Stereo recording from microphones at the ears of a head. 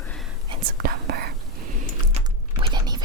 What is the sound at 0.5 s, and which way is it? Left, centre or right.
Whispering, right.